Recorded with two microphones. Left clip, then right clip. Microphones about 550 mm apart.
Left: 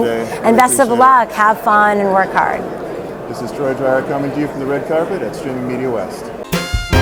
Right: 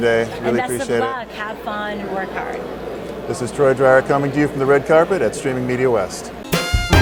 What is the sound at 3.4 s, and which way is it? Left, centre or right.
Speech, right.